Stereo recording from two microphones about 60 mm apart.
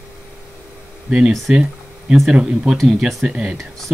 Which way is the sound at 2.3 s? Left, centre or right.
Centre.